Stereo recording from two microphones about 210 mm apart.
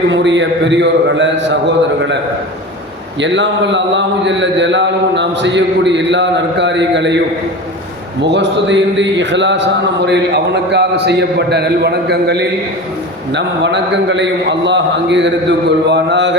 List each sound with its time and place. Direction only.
0.1 s a man's voice: 60° right (ahead or behind)
3.2 s a man's voice: 60° right (ahead or behind)
8.2 s a man's voice: 55° right (ahead or behind)